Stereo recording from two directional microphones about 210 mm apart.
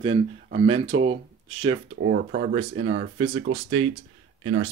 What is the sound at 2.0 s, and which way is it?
Speech, 45° right (ahead or behind).